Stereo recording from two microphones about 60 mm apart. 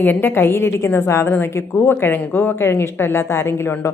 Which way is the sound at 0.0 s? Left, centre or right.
Left.